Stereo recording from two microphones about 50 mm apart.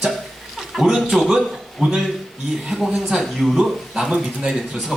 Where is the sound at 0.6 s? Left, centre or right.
Centre.